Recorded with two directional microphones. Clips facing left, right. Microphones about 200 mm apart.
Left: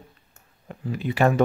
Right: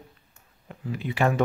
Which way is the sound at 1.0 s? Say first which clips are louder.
Left 4 dB; 40° left (ahead or behind).